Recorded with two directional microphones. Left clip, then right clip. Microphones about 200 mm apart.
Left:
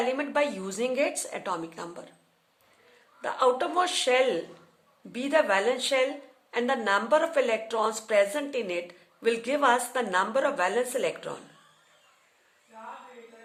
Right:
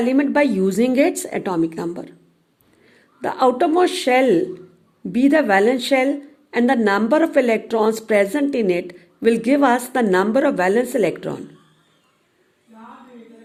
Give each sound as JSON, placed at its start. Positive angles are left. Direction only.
{"t": 0.0, "sound": "a woman's voice", "side_deg": -35}
{"t": 3.2, "sound": "a woman's voice", "side_deg": -35}